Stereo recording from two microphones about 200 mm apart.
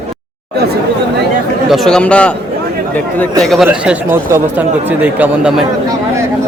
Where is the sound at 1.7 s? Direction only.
Centre (ahead or behind).